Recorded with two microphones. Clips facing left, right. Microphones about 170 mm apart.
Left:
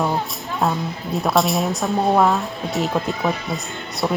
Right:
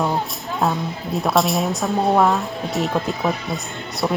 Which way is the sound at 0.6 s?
Centre (ahead or behind).